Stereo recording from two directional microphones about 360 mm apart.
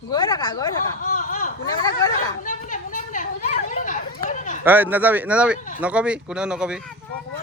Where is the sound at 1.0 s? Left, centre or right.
Left.